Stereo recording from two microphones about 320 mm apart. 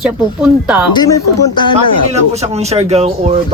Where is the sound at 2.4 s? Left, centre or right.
Centre.